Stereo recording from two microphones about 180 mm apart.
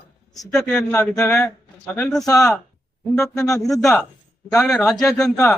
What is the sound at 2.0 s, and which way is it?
Speech, 5° left (ahead or behind).